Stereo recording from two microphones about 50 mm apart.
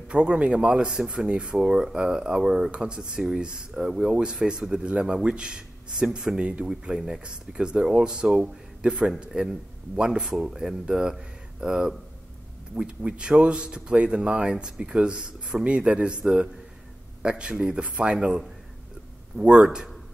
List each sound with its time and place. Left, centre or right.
0.1 s speech: right
6.4 s speech: right